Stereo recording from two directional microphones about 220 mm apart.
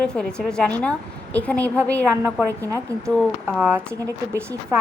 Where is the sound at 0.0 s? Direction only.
5° left (ahead or behind).